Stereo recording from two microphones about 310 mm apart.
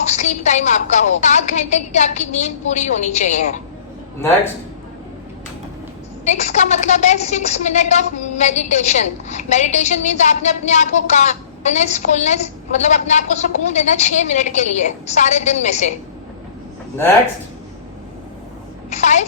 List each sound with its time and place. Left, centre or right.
0.0 s a woman's voice: left
6.2 s a woman's voice: left
18.9 s a woman's voice: left